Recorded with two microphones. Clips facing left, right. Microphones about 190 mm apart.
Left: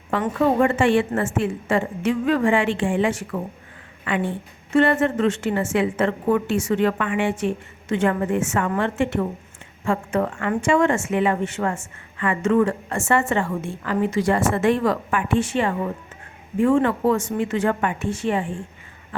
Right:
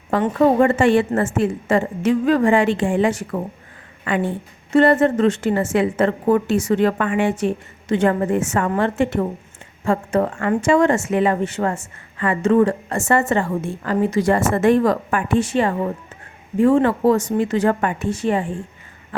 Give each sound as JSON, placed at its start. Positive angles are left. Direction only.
{"t": 0.1, "sound": "a woman's voice", "side_deg": -40}